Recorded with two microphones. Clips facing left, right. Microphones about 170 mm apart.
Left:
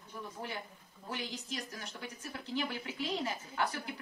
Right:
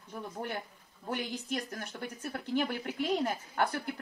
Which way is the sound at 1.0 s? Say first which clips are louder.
Right 5 dB; 55° right (ahead or behind).